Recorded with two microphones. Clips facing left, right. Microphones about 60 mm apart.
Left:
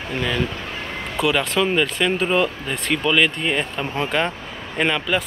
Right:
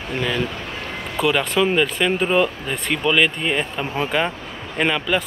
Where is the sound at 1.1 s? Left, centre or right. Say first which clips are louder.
Right 1 dB; centre.